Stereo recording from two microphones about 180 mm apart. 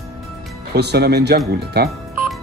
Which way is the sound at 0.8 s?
65° right (ahead or behind).